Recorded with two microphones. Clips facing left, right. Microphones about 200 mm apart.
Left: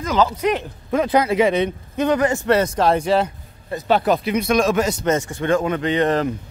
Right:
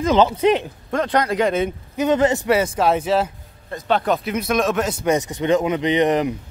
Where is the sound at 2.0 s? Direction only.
20° right (ahead or behind).